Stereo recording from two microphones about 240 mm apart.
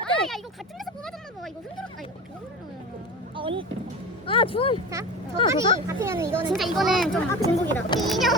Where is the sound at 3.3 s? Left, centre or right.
Right.